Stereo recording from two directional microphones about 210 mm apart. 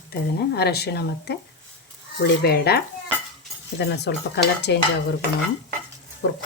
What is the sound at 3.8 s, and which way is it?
Dishes, 55° left (ahead or behind).